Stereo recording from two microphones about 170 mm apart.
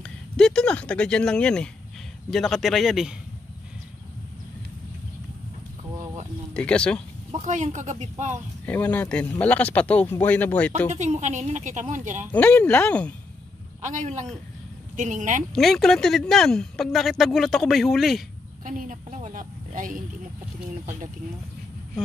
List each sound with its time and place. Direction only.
0.0 s speech: 5° left (ahead or behind)
6.5 s speech: 5° left (ahead or behind)
7.2 s a woman's voice: 45° right (ahead or behind)
8.6 s speech: 10° left (ahead or behind)
10.9 s a woman's voice: 45° right (ahead or behind)
12.3 s speech: 10° left (ahead or behind)
13.7 s a woman's voice: 45° right (ahead or behind)
15.5 s speech: centre (ahead or behind)
18.6 s a woman's voice: 50° right (ahead or behind)